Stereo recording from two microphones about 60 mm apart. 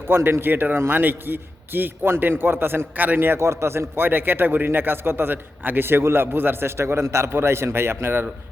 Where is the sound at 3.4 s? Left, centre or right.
Right.